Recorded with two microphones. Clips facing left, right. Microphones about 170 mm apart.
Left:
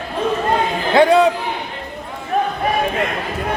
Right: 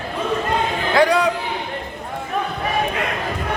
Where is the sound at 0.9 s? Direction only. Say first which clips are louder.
Left 5 dB; 25° left (ahead or behind).